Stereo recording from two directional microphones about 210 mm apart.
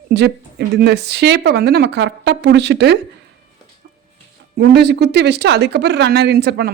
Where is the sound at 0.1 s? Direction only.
55° right (ahead or behind).